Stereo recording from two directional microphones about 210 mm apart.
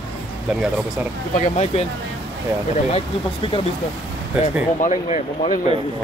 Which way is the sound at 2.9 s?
25° left (ahead or behind).